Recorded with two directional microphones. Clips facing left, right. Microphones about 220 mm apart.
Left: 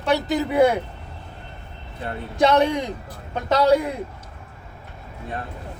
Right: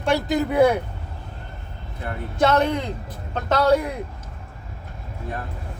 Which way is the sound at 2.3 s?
15° left (ahead or behind).